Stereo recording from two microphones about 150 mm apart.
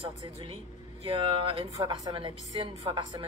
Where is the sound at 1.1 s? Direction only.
35° right (ahead or behind).